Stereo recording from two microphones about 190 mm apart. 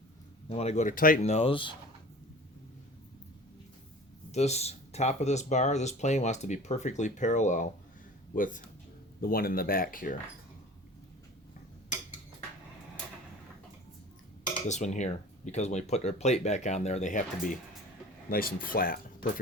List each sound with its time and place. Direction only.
0.4 s speech: 35° left (ahead or behind)
4.3 s speech: 35° left (ahead or behind)
14.7 s speech: 40° left (ahead or behind)